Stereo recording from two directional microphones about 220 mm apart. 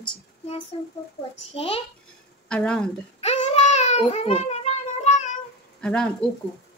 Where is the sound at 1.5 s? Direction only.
25° left (ahead or behind).